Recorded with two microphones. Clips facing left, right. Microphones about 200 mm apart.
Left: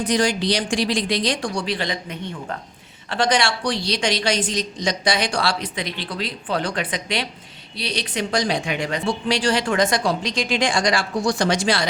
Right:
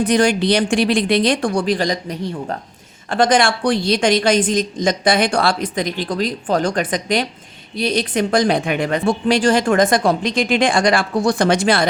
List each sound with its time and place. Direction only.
0.1 s speech: 60° right (ahead or behind); by 2.6 s 35° right (ahead or behind)
3.1 s a woman's voice: 50° right (ahead or behind)